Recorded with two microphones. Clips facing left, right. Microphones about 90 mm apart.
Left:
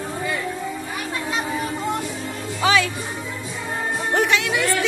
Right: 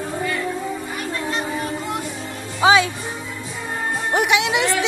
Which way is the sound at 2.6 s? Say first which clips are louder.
Right 4 dB; 20° right (ahead or behind).